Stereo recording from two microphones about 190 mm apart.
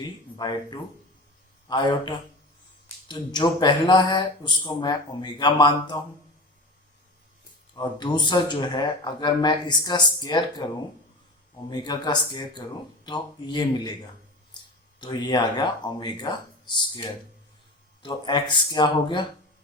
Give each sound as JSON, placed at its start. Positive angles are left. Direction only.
{"t": 0.0, "sound": "speech", "side_deg": 20}
{"t": 7.8, "sound": "speech", "side_deg": 25}
{"t": 15.0, "sound": "speech", "side_deg": 25}